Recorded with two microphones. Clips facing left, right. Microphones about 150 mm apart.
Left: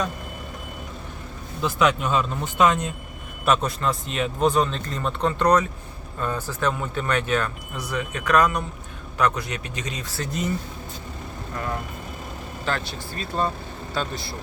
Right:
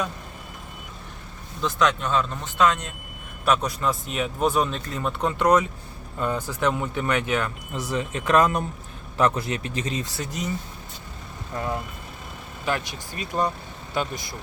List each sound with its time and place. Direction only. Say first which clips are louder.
1.6 s speech: left 2 dB; 10° left (ahead or behind)
3.4 s a man's voice: left 1 dB; centre (ahead or behind); by 7.5 s 15° right (ahead or behind)
7.9 s speech: even; 25° right (ahead or behind)
11.5 s speech: right 2 dB; 20° right (ahead or behind)